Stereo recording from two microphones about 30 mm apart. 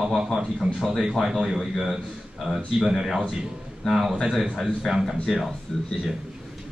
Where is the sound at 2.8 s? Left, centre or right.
Centre.